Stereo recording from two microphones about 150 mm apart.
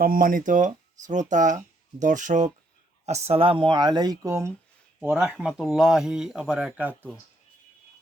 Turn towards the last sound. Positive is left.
turn(degrees=-10)  # may be behind; listen again after turning